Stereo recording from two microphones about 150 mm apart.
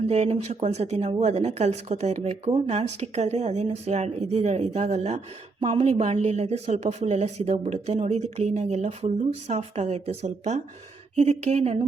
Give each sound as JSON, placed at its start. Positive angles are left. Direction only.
{"t": 0.0, "sound": "speech", "side_deg": -45}